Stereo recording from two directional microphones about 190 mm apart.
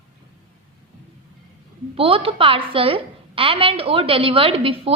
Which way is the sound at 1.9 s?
30° right (ahead or behind).